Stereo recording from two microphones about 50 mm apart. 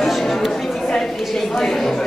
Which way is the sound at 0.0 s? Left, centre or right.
Centre.